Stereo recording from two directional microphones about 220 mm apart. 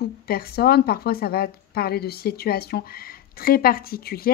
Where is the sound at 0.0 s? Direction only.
45° left (ahead or behind).